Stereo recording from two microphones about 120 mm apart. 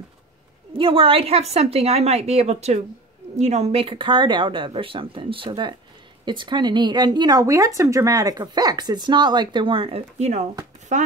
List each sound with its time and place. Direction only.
0.7 s a woman's voice: 50° right (ahead or behind); by 10.4 s 70° right (ahead or behind)
10.9 s speech: 85° right